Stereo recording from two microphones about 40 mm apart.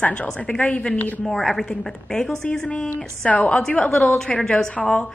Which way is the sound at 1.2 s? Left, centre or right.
Centre.